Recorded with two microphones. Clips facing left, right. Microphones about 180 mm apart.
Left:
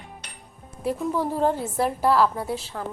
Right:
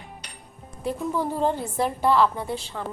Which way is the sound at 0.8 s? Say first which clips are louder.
Left 1 dB; centre (ahead or behind).